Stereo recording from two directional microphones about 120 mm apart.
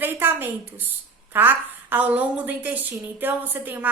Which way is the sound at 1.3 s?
15° right (ahead or behind).